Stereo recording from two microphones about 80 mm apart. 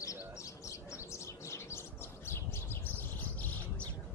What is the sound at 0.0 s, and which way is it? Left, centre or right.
Bird, left.